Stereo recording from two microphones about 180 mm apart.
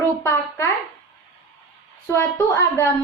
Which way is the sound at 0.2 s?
15° left (ahead or behind).